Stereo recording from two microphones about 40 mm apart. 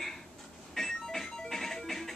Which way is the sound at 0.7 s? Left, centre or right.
Centre.